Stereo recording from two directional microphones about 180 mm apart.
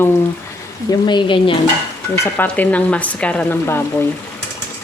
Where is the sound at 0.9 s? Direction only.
25° left (ahead or behind).